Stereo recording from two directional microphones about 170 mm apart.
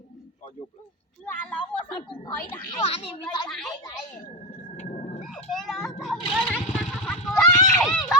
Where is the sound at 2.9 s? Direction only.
35° left (ahead or behind).